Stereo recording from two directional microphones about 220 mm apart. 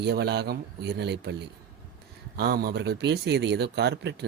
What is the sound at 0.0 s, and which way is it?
A man's voice, 50° right (ahead or behind).